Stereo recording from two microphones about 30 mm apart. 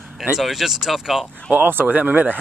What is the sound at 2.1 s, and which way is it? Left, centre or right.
Speech, right.